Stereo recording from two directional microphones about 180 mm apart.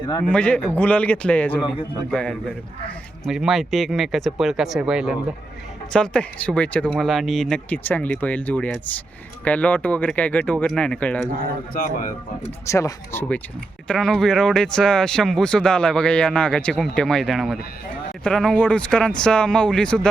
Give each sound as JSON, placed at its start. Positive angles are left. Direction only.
{"t": 0.3, "sound": "speech", "side_deg": 5}
{"t": 3.2, "sound": "speech", "side_deg": 0}
{"t": 11.7, "sound": "speech", "side_deg": 50}
{"t": 12.6, "sound": "speech", "side_deg": 15}